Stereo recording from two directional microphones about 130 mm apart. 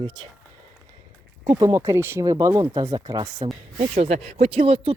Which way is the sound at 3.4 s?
40° right (ahead or behind).